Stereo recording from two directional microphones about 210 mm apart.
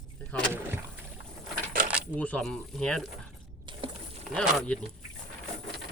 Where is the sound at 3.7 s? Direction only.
20° right (ahead or behind).